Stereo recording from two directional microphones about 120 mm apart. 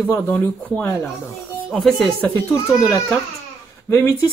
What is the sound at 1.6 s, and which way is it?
Speech, centre (ahead or behind).